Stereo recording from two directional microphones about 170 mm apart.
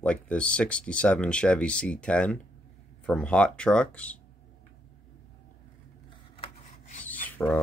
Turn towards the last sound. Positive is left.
turn(degrees=10)  # may be behind; listen again after turning